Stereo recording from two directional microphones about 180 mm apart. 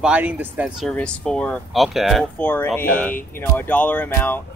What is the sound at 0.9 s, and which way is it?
Speech, 5° left (ahead or behind).